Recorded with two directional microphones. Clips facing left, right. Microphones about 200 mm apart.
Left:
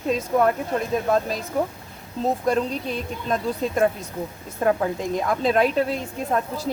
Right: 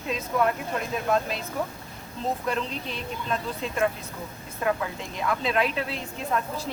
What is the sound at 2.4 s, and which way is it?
A woman's voice, 45° left (ahead or behind).